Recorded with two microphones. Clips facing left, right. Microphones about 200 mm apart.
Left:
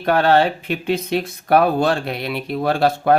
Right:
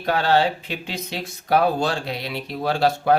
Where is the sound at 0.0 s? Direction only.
60° left (ahead or behind).